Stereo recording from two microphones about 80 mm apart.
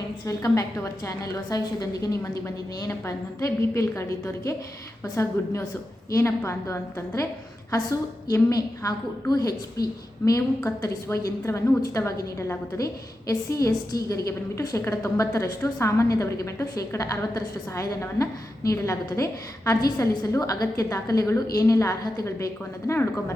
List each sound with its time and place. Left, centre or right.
0.3 s a woman's voice: left